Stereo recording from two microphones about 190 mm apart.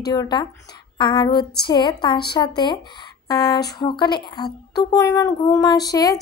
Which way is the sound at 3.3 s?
20° left (ahead or behind).